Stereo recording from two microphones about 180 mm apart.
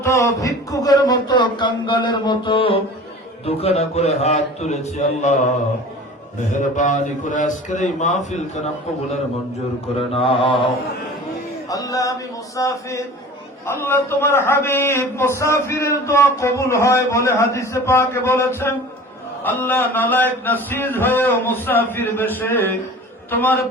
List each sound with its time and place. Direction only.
0.0 s a man's voice: 15° left (ahead or behind); by 5.4 s 40° left (ahead or behind)
6.5 s a man's voice: 45° left (ahead or behind)
10.2 s mantra: 30° left (ahead or behind)
11.7 s a man's voice: 20° left (ahead or behind)